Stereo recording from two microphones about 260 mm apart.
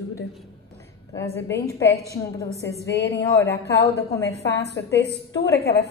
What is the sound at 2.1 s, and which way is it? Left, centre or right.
A woman's voice, centre.